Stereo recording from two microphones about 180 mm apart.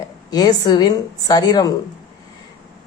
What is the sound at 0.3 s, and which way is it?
A woman's voice, 20° left (ahead or behind).